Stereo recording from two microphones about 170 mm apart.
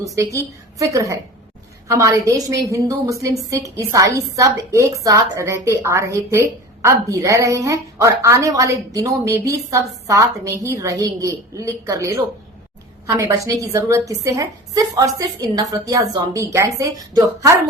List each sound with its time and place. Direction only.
0.2 s a woman's voice: 20° right (ahead or behind)